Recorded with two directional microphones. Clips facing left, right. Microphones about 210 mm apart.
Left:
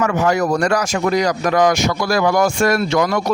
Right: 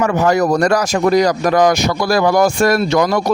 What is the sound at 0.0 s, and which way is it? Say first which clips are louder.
Speech: right 3 dB; 35° right (ahead or behind).